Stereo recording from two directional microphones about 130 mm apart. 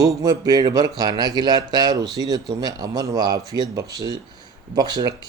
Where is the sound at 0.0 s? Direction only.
25° right (ahead or behind).